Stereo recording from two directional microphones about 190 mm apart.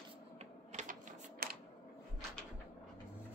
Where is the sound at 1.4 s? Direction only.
50° right (ahead or behind).